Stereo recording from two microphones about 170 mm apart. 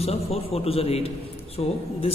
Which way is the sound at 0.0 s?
35° left (ahead or behind).